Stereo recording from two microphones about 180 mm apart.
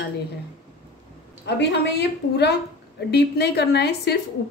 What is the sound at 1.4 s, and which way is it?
A woman's voice, 70° left (ahead or behind).